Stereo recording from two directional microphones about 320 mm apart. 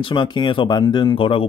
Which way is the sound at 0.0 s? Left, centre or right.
Centre.